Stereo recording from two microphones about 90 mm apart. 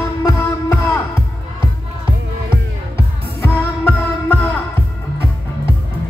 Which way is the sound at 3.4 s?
25° left (ahead or behind).